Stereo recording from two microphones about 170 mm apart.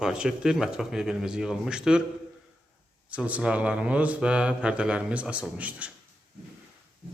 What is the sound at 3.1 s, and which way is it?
Speech, 5° right (ahead or behind).